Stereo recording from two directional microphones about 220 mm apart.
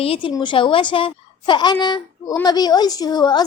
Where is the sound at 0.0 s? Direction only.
25° left (ahead or behind).